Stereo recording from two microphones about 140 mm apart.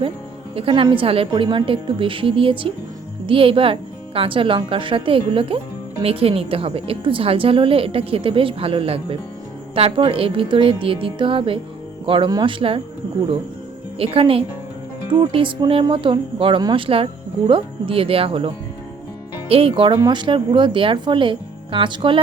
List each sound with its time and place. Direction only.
0.5 s speech: 40° right (ahead or behind)
14.0 s speech: 40° right (ahead or behind)